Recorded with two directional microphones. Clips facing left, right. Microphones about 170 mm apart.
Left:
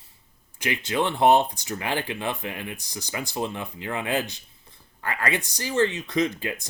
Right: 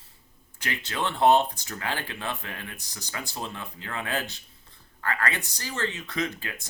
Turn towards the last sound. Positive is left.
turn(degrees=15)  # may be behind; listen again after turning